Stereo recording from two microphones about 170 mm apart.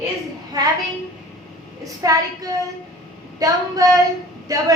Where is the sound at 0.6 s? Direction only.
20° right (ahead or behind).